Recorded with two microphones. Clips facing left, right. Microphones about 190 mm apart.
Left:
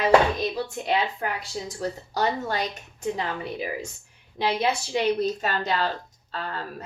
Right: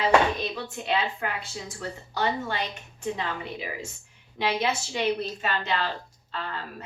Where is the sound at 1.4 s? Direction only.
40° left (ahead or behind).